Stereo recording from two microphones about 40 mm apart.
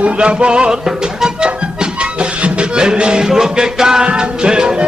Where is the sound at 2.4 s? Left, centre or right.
Right.